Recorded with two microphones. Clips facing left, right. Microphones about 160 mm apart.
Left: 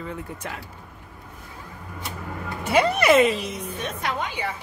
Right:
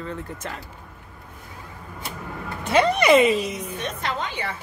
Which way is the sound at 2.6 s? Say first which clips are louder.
Right 1 dB; 10° left (ahead or behind).